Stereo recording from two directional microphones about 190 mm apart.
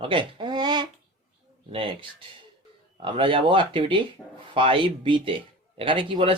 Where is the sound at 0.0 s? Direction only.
25° right (ahead or behind).